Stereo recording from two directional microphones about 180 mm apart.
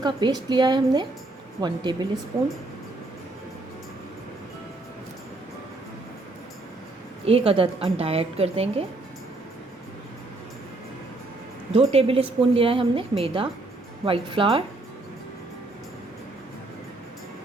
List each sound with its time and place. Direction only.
0.0 s a woman's voice: 25° right (ahead or behind)
7.3 s a woman's voice: 30° right (ahead or behind)
11.7 s a woman's voice: 35° right (ahead or behind)